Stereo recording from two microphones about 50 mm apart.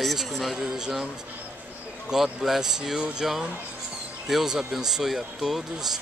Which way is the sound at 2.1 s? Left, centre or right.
Centre.